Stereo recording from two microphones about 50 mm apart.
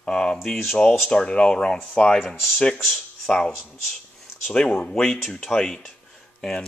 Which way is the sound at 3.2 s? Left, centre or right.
Centre.